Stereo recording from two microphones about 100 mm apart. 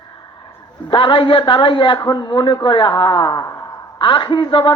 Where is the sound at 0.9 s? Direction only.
55° left (ahead or behind).